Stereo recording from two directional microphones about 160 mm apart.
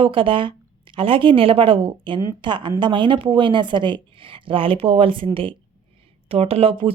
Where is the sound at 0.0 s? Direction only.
35° right (ahead or behind).